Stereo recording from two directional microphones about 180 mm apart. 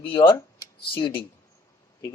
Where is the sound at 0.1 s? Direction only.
20° left (ahead or behind).